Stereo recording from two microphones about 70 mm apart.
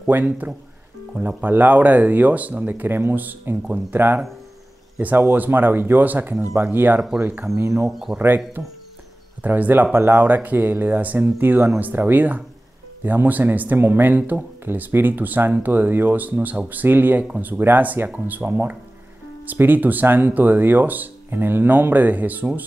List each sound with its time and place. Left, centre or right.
0.0 s speech: right
7.5 s speech: right
9.4 s speech: right